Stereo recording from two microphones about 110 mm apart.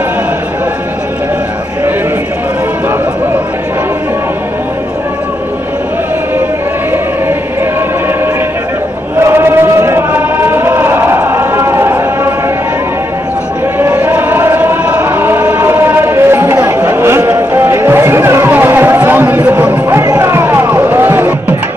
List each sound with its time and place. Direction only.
9.2 s chant: 25° right (ahead or behind)
13.7 s choir: 20° right (ahead or behind)
20.1 s music: 30° right (ahead or behind)